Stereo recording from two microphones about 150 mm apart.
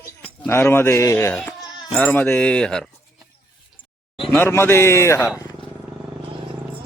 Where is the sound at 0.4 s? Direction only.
15° left (ahead or behind).